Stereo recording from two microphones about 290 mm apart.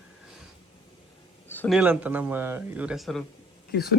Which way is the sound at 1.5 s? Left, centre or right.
Centre.